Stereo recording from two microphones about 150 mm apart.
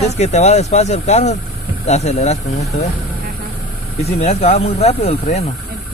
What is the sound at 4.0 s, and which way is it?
Speech, 45° left (ahead or behind).